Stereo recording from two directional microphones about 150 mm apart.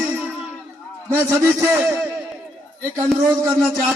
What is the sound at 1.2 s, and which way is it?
Speech, 15° right (ahead or behind).